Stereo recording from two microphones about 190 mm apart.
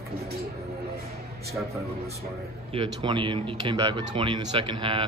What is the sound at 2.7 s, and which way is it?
Speech, 25° right (ahead or behind).